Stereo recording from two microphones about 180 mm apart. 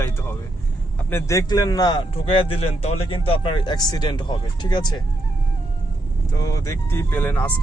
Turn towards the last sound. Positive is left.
turn(degrees=10)  # may be behind; listen again after turning